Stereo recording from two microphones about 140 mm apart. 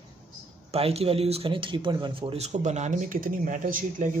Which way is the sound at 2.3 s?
55° right (ahead or behind).